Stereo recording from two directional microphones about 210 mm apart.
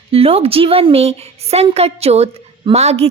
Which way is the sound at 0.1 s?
30° right (ahead or behind).